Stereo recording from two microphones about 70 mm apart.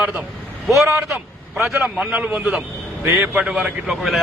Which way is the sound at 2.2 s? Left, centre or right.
Right.